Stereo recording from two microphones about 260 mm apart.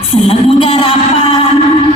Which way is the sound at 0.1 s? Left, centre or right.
Left.